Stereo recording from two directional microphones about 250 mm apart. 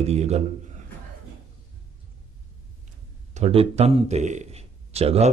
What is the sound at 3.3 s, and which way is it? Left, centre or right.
A man's voice, right.